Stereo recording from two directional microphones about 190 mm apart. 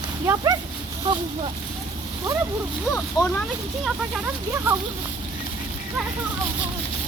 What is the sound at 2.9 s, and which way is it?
Speech, 10° left (ahead or behind).